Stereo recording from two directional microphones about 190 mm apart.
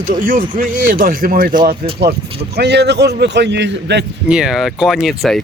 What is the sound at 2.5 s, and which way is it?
A man's voice, 60° right (ahead or behind).